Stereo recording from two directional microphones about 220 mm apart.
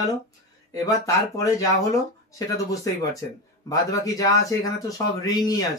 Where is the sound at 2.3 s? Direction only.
15° left (ahead or behind).